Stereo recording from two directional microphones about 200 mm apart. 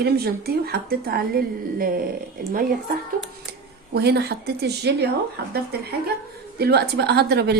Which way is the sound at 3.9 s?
55° right (ahead or behind).